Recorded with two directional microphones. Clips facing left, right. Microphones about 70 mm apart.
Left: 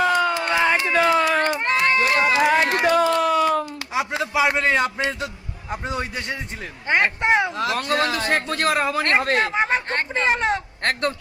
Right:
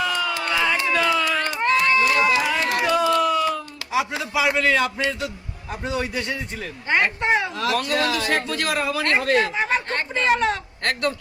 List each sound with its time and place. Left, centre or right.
0.0 s run: left
0.3 s run: left
3.9 s a man's voice: left